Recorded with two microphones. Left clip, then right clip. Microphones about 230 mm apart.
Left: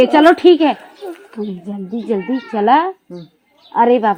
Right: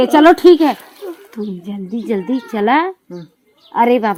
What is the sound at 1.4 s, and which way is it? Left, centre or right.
Speech, right.